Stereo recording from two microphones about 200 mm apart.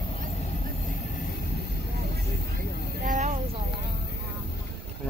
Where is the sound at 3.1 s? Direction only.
35° right (ahead or behind).